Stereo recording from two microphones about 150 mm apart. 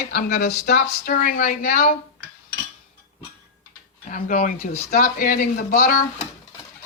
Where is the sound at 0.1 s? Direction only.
65° left (ahead or behind).